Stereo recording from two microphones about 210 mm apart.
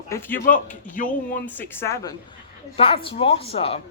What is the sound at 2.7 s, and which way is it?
Speech, 25° left (ahead or behind).